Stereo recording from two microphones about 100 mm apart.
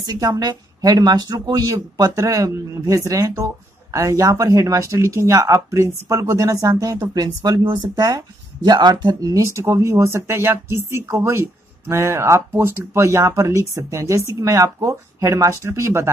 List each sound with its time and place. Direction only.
0.0 s speech: 40° right (ahead or behind)